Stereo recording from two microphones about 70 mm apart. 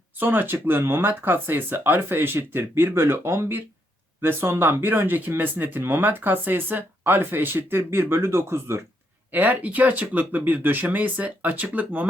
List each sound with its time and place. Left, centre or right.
0.2 s speech: right
9.3 s speech: right